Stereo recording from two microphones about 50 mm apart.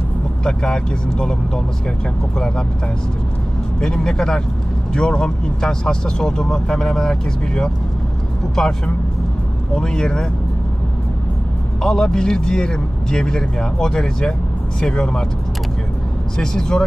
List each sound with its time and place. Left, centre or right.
0.5 s speech: centre
3.8 s speech: centre
11.8 s speech: centre
16.3 s speech: centre